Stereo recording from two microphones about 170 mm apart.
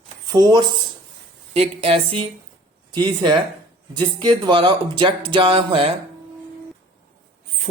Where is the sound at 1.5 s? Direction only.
35° right (ahead or behind).